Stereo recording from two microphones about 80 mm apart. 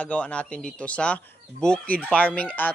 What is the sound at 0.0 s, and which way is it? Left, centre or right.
Speech, centre.